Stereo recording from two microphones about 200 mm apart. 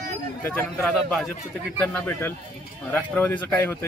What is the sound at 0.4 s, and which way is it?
Speech, 10° left (ahead or behind).